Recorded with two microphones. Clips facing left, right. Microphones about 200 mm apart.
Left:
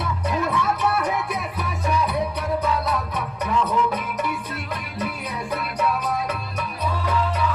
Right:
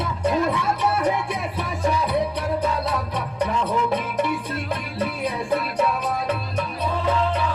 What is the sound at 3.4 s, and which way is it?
Music, 30° right (ahead or behind).